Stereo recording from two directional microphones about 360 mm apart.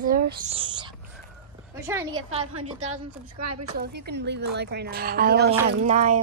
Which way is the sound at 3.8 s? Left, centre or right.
Right.